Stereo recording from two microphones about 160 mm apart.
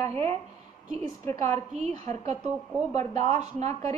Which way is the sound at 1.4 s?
45° right (ahead or behind).